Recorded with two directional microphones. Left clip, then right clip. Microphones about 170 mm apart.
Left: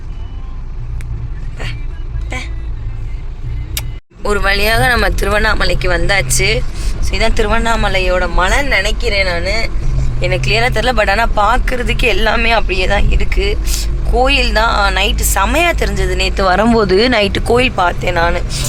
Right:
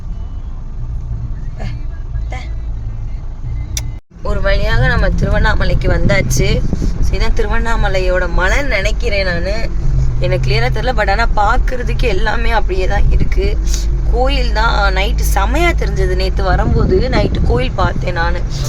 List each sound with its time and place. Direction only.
4.2 s speech: 15° left (ahead or behind); by 10.6 s 10° right (ahead or behind)
10.6 s speech: centre (ahead or behind)
16.5 s speech: 45° left (ahead or behind)
17.5 s speech: 20° left (ahead or behind)